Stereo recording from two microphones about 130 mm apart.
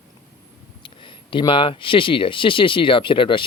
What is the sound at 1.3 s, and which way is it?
Speech, 40° left (ahead or behind).